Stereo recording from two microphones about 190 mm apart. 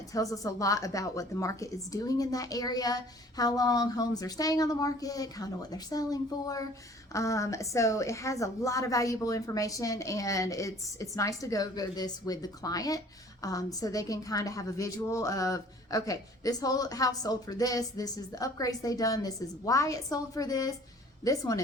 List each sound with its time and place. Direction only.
0.1 s a woman's voice: 15° left (ahead or behind)